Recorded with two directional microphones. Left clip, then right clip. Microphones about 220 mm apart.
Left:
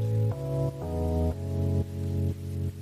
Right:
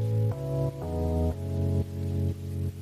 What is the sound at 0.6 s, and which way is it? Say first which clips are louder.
Music: even; centre (ahead or behind).